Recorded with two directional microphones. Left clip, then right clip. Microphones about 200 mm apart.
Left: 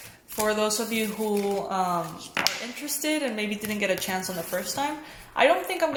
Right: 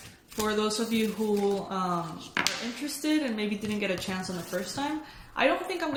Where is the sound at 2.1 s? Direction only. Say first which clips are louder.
Left 2 dB; 10° left (ahead or behind).